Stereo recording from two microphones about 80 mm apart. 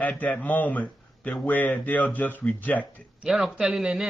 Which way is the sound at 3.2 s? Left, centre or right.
Centre.